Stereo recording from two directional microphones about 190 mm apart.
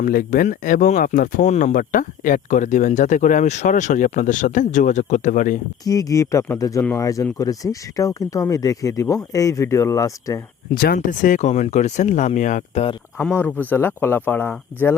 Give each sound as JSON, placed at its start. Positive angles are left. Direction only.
{"t": 0.0, "sound": "speech", "side_deg": 50}
{"t": 5.8, "sound": "speech", "side_deg": 20}
{"t": 10.7, "sound": "speech", "side_deg": 50}
{"t": 13.1, "sound": "speech", "side_deg": 10}